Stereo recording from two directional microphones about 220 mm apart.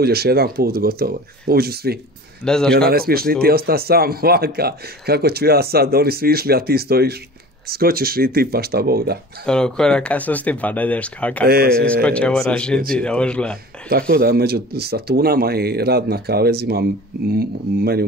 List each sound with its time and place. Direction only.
0.0 s speech: 45° right (ahead or behind)
2.4 s speech: 5° left (ahead or behind)
2.9 s speech: 45° right (ahead or behind)
9.5 s speech: 5° left (ahead or behind)
11.4 s speech: 45° right (ahead or behind)
11.7 s speech: 5° left (ahead or behind)
13.8 s speech: 45° right (ahead or behind)